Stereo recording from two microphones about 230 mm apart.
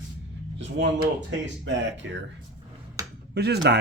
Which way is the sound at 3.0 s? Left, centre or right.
Centre.